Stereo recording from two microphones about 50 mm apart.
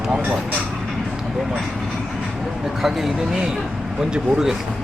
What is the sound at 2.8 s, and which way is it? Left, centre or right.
Speech, centre.